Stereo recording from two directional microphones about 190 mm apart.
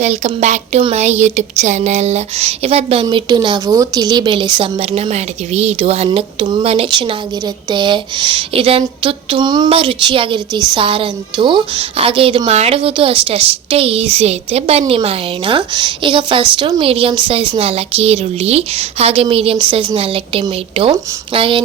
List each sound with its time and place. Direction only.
0.0 s speech: 35° right (ahead or behind)